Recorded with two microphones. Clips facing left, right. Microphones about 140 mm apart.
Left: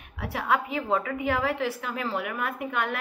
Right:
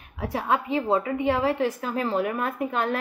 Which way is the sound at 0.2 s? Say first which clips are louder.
Right 2 dB; 35° right (ahead or behind).